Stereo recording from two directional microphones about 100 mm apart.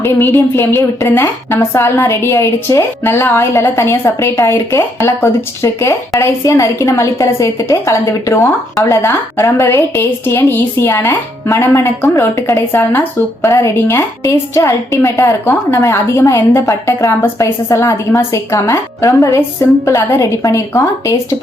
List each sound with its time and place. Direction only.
0.0 s a woman's voice: 25° left (ahead or behind)
13.4 s a woman's voice: 35° left (ahead or behind)